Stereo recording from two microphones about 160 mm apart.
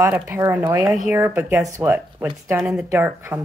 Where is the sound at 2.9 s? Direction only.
15° right (ahead or behind).